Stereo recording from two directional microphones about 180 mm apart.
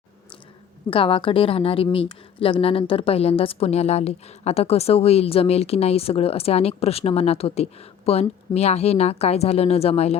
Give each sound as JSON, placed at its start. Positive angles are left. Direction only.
{"t": 0.9, "sound": "a woman's voice", "side_deg": 30}